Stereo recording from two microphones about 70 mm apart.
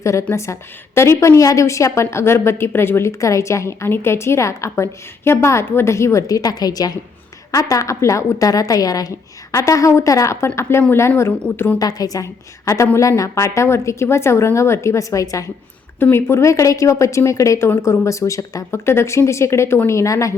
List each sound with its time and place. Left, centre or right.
0.0 s a woman's voice: left
11.8 s a woman's voice: left
16.0 s a woman's voice: left
18.9 s a woman's voice: left